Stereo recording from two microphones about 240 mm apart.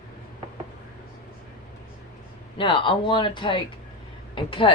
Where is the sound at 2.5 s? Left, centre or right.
Left.